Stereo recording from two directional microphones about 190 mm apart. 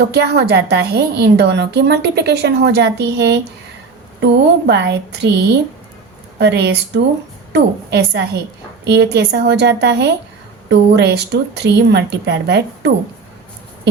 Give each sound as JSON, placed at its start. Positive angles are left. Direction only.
{"t": 0.0, "sound": "a woman's voice", "side_deg": -60}
{"t": 6.4, "sound": "a woman's voice", "side_deg": -60}